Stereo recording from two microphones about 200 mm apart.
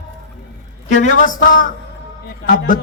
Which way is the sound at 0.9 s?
40° left (ahead or behind).